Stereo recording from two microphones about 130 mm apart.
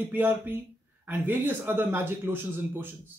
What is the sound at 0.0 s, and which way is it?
Speech, 15° right (ahead or behind).